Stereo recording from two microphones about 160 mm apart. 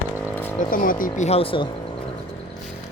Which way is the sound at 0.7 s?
60° left (ahead or behind).